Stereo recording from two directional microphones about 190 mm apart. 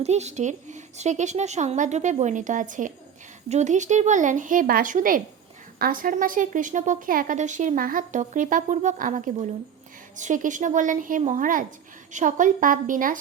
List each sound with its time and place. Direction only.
0.0 s a woman's voice: 35° right (ahead or behind)